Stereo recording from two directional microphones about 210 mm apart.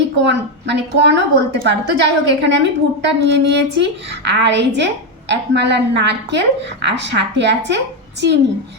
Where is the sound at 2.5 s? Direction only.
55° right (ahead or behind).